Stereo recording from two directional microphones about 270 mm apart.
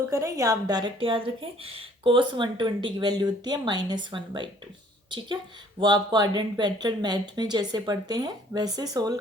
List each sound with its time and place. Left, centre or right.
0.1 s a woman's voice: centre
5.8 s a woman's voice: centre